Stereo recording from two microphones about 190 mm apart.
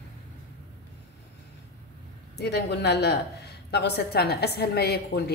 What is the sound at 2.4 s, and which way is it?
A woman's voice, 60° left (ahead or behind).